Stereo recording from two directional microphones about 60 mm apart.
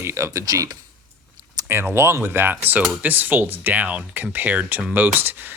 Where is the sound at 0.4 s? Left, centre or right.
Right.